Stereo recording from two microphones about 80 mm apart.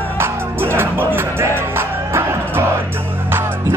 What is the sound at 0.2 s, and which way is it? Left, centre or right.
Music, right.